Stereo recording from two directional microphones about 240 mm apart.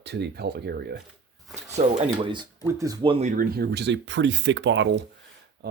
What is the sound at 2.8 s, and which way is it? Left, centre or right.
Speech, centre.